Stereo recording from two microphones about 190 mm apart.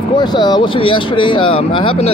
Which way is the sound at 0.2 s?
20° left (ahead or behind).